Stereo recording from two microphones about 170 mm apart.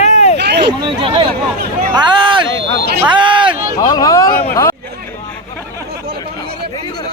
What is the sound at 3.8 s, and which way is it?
Speech, 20° left (ahead or behind).